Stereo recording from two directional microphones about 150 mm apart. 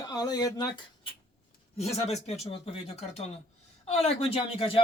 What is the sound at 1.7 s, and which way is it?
Speech, 45° left (ahead or behind).